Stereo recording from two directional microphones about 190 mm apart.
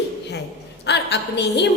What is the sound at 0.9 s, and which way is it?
Speech, 65° left (ahead or behind).